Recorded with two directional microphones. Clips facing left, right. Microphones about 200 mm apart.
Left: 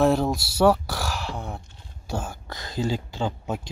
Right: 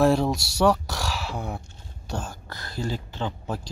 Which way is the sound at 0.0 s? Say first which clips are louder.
Even; centre (ahead or behind).